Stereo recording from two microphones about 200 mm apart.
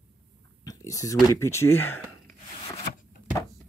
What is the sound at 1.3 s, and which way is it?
Speech, 15° left (ahead or behind).